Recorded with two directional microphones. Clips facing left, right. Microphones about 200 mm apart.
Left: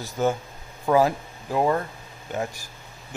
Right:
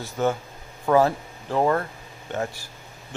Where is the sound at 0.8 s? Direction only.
10° left (ahead or behind).